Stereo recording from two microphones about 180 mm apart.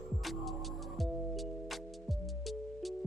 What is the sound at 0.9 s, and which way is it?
Music, centre (ahead or behind).